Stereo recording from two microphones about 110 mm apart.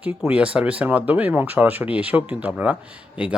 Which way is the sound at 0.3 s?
10° right (ahead or behind).